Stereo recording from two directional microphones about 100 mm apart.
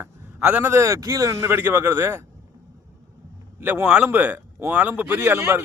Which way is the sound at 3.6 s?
20° right (ahead or behind).